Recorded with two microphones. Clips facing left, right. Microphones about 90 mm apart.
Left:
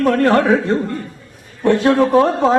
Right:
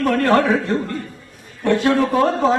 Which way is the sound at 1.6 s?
25° left (ahead or behind).